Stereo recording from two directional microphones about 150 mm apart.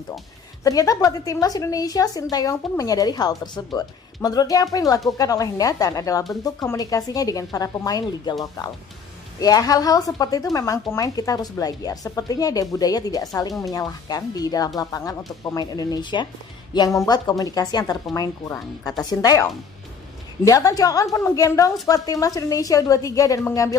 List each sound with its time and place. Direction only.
0.7 s a woman's voice: 25° left (ahead or behind)
19.0 s a woman's voice: 25° left (ahead or behind)